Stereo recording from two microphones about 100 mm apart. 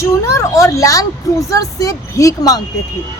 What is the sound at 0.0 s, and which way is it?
Speech, 30° left (ahead or behind).